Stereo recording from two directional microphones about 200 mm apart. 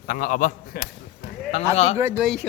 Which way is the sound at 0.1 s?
40° left (ahead or behind).